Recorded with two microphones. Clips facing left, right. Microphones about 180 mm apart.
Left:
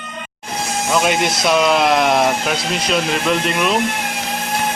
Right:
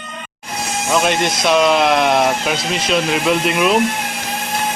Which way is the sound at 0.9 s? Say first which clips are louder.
Right 1 dB; centre (ahead or behind).